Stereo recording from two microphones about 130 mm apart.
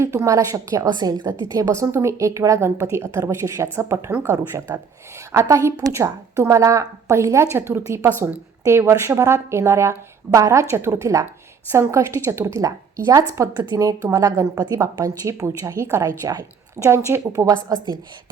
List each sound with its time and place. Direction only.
0.0 s a woman's voice: 20° right (ahead or behind)